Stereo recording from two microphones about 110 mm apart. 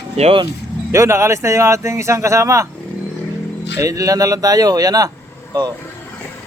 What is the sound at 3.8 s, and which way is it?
Speech, 30° right (ahead or behind).